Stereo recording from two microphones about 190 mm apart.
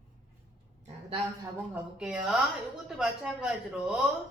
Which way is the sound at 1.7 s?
5° right (ahead or behind).